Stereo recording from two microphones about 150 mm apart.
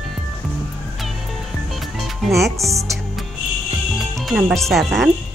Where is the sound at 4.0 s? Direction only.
Centre (ahead or behind).